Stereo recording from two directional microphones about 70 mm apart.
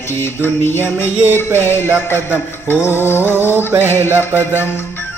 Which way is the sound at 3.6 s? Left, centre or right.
Right.